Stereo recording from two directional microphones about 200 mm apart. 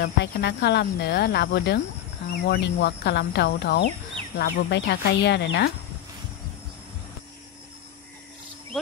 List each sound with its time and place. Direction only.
0.0 s speech: 55° left (ahead or behind)